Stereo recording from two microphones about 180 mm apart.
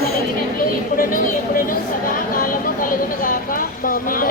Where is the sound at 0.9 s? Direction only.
50° left (ahead or behind).